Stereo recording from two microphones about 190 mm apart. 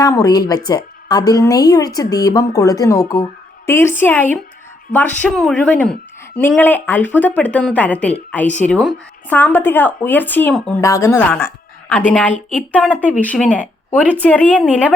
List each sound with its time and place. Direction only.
0.0 s a woman's voice: 20° left (ahead or behind)